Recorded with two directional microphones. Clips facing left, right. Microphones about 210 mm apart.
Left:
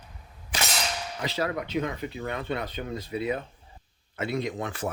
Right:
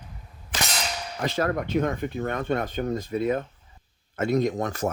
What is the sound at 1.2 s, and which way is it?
Speech, 50° right (ahead or behind).